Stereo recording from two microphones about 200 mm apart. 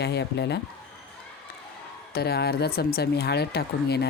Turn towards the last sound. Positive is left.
turn(degrees=55)  # may be behind; listen again after turning